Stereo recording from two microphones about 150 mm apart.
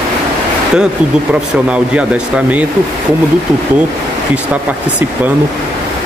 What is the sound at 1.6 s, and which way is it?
Speech, 10° right (ahead or behind).